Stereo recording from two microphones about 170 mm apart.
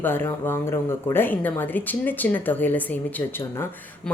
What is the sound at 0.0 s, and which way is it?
Speech, 10° left (ahead or behind).